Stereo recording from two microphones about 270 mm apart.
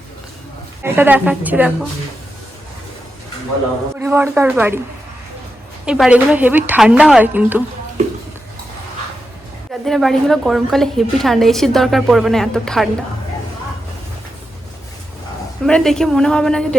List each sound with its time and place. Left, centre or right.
0.8 s a woman's voice: centre
3.9 s a woman's voice: centre
5.8 s a woman's voice: centre
9.8 s a woman's voice: centre
15.6 s a woman's voice: centre